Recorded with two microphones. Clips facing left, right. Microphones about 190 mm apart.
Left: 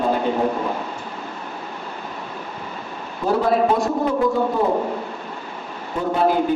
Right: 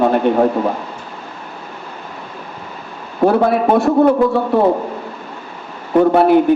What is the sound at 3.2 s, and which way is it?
A man's voice, 60° right (ahead or behind).